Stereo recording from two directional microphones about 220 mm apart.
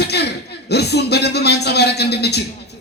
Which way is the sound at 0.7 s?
50° left (ahead or behind).